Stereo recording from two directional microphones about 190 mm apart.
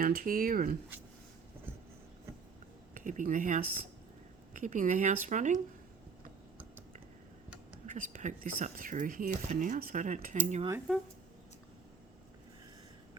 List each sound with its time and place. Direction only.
0.0 s speech: 50° right (ahead or behind)
2.9 s speech: 40° right (ahead or behind)
7.9 s speech: 45° right (ahead or behind)